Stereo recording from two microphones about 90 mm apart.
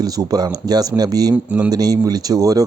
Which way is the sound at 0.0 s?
45° right (ahead or behind).